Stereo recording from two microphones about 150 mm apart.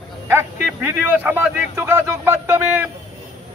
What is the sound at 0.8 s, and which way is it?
A man's voice, 15° right (ahead or behind).